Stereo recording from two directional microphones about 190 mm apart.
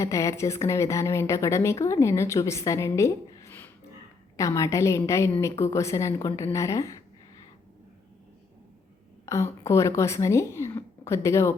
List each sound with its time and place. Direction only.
0.0 s speech: 15° left (ahead or behind)
9.2 s speech: 15° left (ahead or behind)